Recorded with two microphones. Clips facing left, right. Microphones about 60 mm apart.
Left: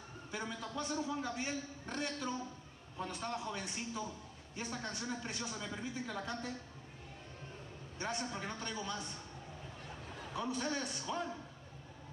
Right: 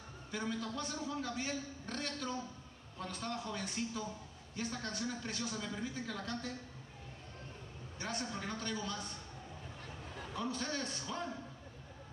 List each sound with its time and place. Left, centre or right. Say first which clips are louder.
0.3 s a man's voice: right 3 dB; left
8.0 s a man's voice: left 1 dB; left
10.3 s a man's voice: left 1 dB; centre